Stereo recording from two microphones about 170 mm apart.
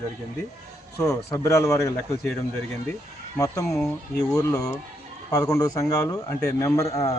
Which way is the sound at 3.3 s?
15° left (ahead or behind).